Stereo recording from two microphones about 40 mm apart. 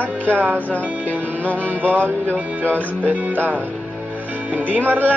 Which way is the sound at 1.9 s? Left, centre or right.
Right.